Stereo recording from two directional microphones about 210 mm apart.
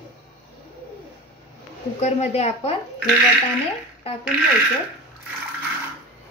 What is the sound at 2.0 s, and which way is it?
Speech, 30° left (ahead or behind).